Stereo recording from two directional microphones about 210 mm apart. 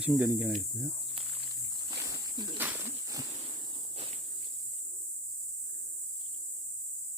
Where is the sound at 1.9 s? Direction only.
20° right (ahead or behind).